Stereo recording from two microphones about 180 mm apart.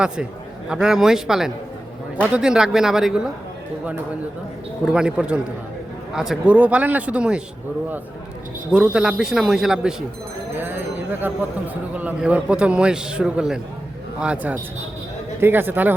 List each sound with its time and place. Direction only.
0.7 s a man's voice: 5° right (ahead or behind)
4.9 s a man's voice: 5° right (ahead or behind)
8.7 s a man's voice: 5° right (ahead or behind)
10.6 s a sound: 10° right (ahead or behind)
11.7 s a man's voice: 10° right (ahead or behind)